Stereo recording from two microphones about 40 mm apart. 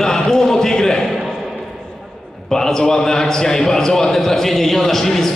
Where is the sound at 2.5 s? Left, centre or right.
Centre.